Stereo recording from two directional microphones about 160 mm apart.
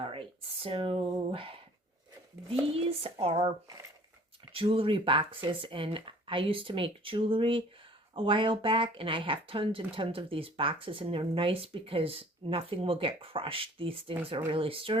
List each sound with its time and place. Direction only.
0.0 s speech: 35° right (ahead or behind)
4.5 s speech: 35° right (ahead or behind)